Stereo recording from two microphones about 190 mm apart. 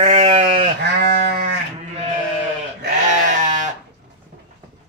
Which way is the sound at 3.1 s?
40° right (ahead or behind).